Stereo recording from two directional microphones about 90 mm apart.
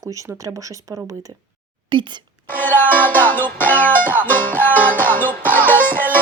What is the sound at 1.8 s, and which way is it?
Speech, 60° right (ahead or behind).